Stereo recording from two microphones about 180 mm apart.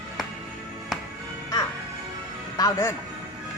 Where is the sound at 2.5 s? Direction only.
15° left (ahead or behind).